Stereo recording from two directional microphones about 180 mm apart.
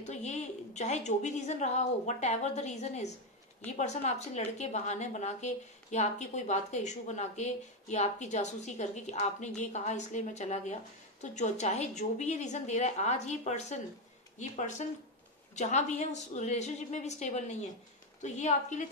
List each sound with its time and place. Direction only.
0.0 s a woman's voice: 40° left (ahead or behind)